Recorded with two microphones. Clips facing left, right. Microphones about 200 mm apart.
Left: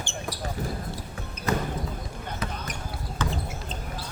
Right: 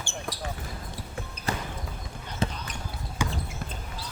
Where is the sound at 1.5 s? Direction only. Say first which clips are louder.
Left 6 dB; 30° right (ahead or behind).